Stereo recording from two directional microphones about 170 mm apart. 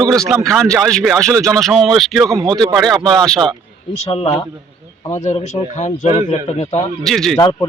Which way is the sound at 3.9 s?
35° left (ahead or behind).